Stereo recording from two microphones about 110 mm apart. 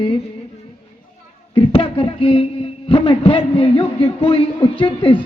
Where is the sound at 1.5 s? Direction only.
55° left (ahead or behind).